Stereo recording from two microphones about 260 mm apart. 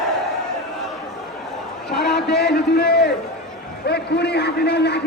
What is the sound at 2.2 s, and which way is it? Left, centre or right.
A man's voice, left.